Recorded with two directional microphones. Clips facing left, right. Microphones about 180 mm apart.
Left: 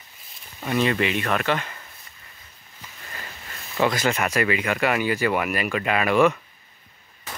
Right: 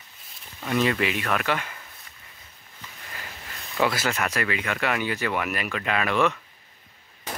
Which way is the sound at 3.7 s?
5° right (ahead or behind).